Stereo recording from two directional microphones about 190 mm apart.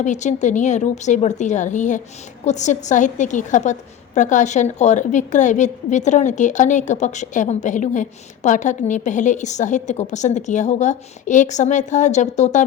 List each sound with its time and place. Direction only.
0.0 s a woman's voice: 40° left (ahead or behind)